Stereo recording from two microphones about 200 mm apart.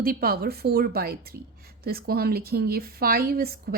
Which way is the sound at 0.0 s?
50° right (ahead or behind).